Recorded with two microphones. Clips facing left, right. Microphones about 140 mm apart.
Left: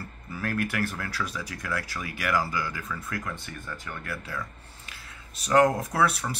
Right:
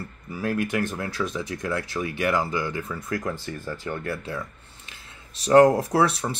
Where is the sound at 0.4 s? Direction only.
20° right (ahead or behind).